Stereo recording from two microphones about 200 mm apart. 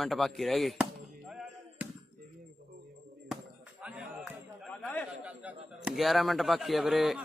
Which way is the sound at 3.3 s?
5° right (ahead or behind).